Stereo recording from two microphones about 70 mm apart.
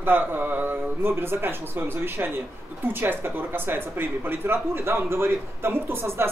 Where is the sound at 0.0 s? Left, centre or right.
Right.